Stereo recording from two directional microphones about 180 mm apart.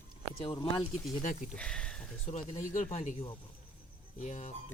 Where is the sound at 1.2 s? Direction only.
45° left (ahead or behind).